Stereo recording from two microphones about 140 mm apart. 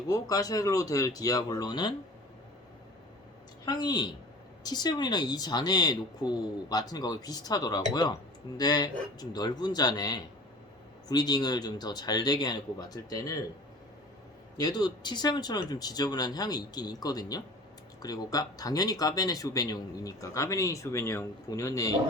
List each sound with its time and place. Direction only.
0.1 s speech: 25° left (ahead or behind)
3.7 s a woman's voice: 30° left (ahead or behind)
14.6 s speech: 30° left (ahead or behind)